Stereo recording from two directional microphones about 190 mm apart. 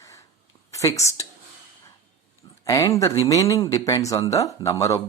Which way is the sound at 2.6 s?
15° left (ahead or behind).